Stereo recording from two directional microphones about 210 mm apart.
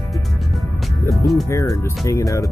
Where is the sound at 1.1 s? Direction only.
Centre (ahead or behind).